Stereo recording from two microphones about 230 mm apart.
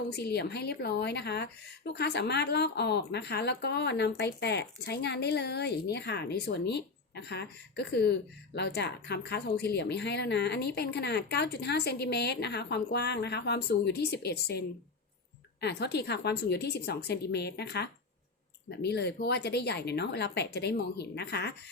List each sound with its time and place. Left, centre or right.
0.1 s speech: left
15.6 s speech: left